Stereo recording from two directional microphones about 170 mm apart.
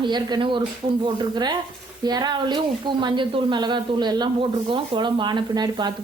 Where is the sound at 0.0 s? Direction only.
25° right (ahead or behind).